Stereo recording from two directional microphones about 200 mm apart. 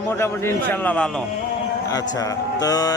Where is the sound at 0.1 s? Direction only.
10° left (ahead or behind).